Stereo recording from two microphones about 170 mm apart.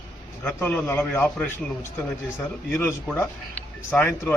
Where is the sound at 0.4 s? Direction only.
10° left (ahead or behind).